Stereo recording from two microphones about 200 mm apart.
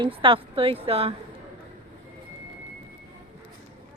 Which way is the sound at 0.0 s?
25° right (ahead or behind).